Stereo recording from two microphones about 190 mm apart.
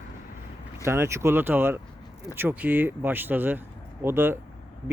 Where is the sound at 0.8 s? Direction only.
15° right (ahead or behind).